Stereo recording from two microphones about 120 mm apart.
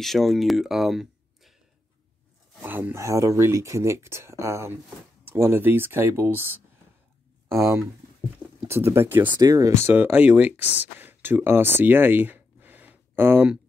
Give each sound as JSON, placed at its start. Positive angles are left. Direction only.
{"t": 0.0, "sound": "speech", "side_deg": 0}
{"t": 2.6, "sound": "speech", "side_deg": -15}
{"t": 9.3, "sound": "speech", "side_deg": -30}
{"t": 9.8, "sound": "speech", "side_deg": -15}